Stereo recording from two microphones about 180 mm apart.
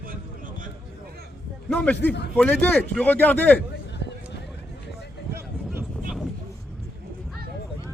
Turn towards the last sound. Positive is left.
turn(degrees=-10)  # may be behind; listen again after turning